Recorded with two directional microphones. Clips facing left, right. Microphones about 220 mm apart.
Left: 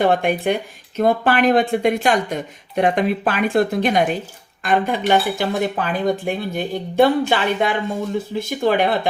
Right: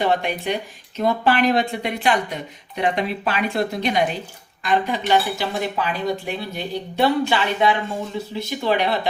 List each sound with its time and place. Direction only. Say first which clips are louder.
0.0 s speech: left 4 dB; 50° left (ahead or behind)